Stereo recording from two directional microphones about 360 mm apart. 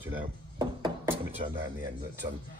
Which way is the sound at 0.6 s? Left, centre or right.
Centre.